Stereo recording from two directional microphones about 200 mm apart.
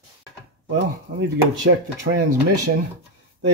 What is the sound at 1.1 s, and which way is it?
Speech, 45° right (ahead or behind).